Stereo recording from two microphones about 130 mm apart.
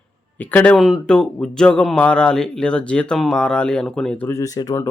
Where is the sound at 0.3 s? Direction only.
15° left (ahead or behind).